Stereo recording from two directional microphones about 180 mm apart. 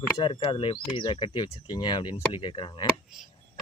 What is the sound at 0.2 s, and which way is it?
Speech, 30° left (ahead or behind).